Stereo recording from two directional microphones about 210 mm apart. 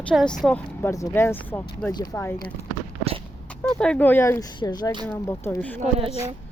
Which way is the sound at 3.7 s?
5° left (ahead or behind).